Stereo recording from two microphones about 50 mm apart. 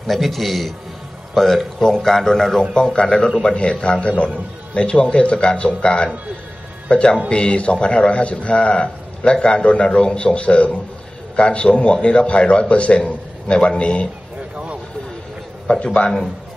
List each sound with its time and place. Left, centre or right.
0.0 s a man's voice: centre; by 14.0 s left
15.7 s a man's voice: centre